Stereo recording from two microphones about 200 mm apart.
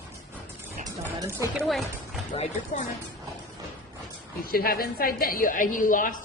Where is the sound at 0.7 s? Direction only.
15° right (ahead or behind).